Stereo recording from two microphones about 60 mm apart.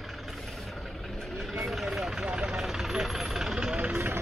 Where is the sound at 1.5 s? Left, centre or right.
Centre.